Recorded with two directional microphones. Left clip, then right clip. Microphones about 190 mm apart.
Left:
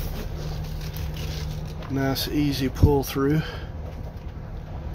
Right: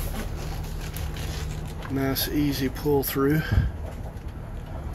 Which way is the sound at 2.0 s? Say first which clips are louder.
Left 1 dB; 15° left (ahead or behind).